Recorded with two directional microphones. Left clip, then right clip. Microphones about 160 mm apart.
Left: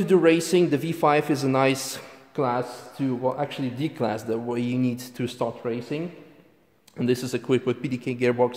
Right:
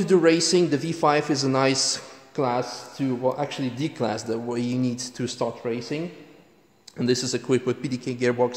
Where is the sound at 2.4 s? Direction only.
Centre (ahead or behind).